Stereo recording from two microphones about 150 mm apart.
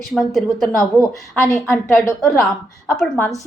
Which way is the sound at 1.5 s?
15° left (ahead or behind).